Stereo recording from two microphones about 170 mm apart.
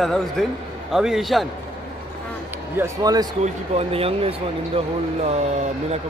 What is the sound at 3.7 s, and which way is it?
Speech, 35° right (ahead or behind).